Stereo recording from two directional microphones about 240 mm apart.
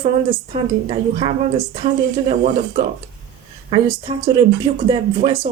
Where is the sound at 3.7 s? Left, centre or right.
Centre.